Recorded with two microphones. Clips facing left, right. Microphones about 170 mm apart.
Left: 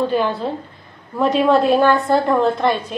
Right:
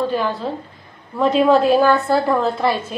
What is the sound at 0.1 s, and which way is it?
A woman's voice, centre (ahead or behind).